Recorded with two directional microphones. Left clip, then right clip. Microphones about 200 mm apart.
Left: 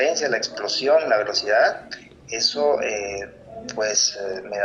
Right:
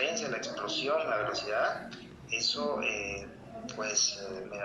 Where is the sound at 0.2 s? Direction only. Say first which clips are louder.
Left 11 dB; 30° left (ahead or behind).